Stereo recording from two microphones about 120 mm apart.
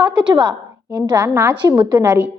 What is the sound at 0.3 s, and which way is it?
Speech, 35° right (ahead or behind).